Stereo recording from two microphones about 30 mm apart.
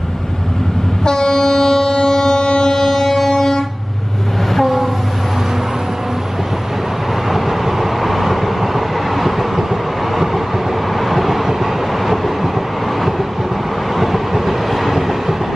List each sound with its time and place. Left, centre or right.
1.0 s train: left
2.7 s music: centre
4.6 s train: centre
7.2 s train: centre
11.1 s vehicle: centre
13.9 s train: centre